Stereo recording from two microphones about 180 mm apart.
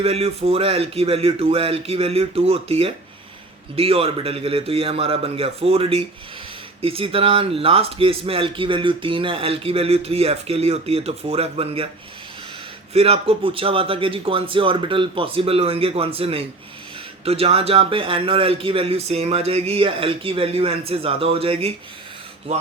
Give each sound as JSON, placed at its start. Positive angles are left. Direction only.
{"t": 0.0, "sound": "speech", "side_deg": -35}
{"t": 12.9, "sound": "speech", "side_deg": -35}